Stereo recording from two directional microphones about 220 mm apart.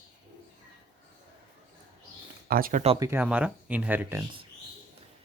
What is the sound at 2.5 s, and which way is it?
Speech, 40° right (ahead or behind).